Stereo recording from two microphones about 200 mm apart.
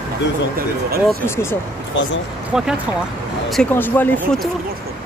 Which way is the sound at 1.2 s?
10° left (ahead or behind).